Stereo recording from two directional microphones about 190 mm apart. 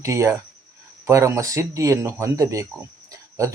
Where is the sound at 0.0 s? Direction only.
15° right (ahead or behind).